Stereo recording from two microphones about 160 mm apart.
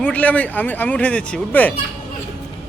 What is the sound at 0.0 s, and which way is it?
Speech, 10° left (ahead or behind).